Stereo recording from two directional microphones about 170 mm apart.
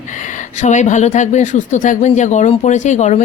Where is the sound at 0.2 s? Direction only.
50° left (ahead or behind).